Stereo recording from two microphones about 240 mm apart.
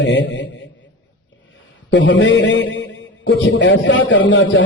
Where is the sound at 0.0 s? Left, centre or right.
Left.